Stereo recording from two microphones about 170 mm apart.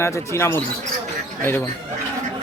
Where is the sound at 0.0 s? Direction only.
15° left (ahead or behind).